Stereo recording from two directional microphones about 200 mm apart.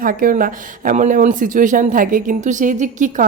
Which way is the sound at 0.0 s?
45° right (ahead or behind).